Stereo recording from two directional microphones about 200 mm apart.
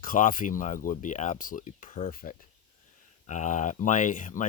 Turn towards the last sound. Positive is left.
turn(degrees=40)  # may be behind; listen again after turning